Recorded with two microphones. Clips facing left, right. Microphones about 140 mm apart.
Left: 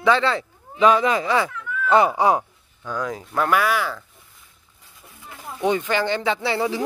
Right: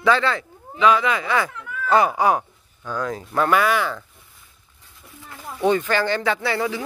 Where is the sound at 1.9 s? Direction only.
25° left (ahead or behind).